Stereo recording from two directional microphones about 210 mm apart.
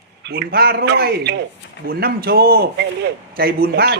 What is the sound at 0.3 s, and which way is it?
A man's voice, 50° right (ahead or behind).